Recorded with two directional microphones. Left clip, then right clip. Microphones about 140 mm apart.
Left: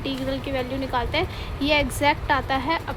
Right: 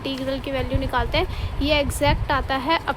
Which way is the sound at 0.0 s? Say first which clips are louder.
Right 1 dB; 20° right (ahead or behind).